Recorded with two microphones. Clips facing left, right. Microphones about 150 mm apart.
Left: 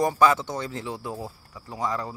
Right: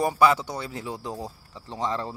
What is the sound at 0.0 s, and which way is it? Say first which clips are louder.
Speech: even; 15° right (ahead or behind).